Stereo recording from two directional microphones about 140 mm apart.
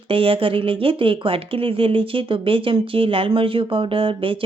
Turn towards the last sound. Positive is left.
turn(degrees=-40)  # may be behind; listen again after turning